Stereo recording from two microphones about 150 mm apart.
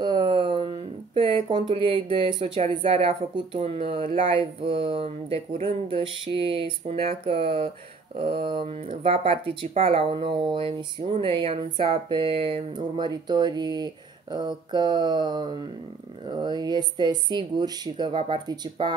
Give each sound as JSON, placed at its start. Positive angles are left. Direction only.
{"t": 0.0, "sound": "speech", "side_deg": -30}